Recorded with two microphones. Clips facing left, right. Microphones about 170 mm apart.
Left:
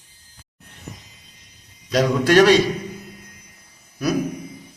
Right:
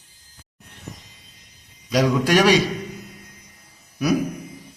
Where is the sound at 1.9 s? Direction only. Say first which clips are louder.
Left 2 dB; 10° right (ahead or behind).